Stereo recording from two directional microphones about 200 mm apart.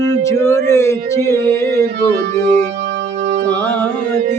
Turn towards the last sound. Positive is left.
turn(degrees=10)  # may be behind; listen again after turning